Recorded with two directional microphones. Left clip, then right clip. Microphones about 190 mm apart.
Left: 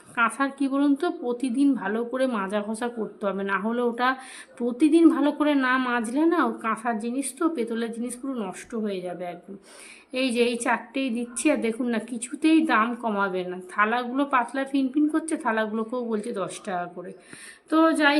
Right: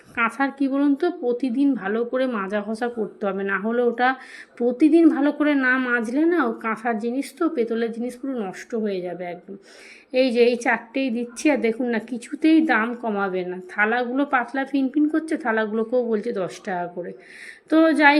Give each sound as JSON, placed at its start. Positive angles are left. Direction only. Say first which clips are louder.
{"t": 0.2, "sound": "a woman's voice", "louder": "right 2 dB", "side_deg": -10}